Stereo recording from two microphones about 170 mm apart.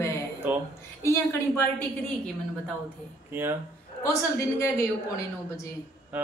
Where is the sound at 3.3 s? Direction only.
10° right (ahead or behind).